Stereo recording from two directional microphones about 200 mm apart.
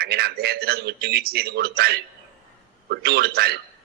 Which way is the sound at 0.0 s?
50° right (ahead or behind).